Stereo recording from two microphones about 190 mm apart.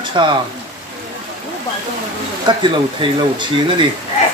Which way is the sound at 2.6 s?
25° right (ahead or behind).